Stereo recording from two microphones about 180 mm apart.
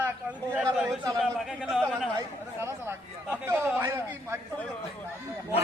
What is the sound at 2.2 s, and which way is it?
Speech, 15° right (ahead or behind).